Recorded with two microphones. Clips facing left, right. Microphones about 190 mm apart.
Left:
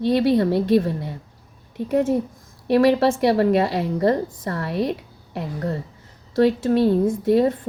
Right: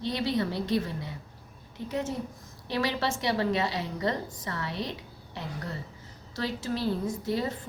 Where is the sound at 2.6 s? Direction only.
55° left (ahead or behind).